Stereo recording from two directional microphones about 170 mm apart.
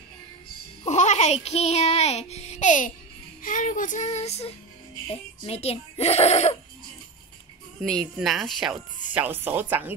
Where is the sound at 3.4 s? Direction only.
50° left (ahead or behind).